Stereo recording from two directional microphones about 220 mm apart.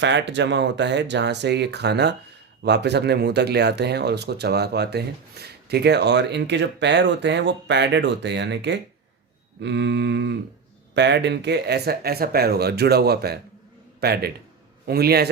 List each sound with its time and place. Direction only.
0.0 s speech: 55° right (ahead or behind)